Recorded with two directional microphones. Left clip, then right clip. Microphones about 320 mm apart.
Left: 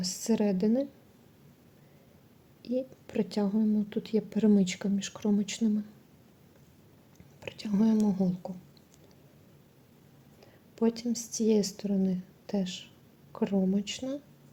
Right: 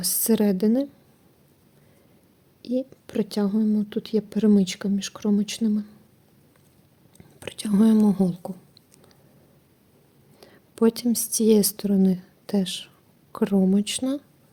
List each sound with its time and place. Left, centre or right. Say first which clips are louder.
0.0 s speech: right 7 dB; right
2.6 s speech: right 5 dB; centre
7.3 s speech: right 8 dB; right
10.4 s speech: right 8 dB; right